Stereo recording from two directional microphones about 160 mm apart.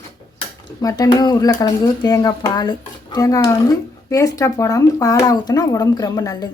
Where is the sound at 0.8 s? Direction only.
20° left (ahead or behind).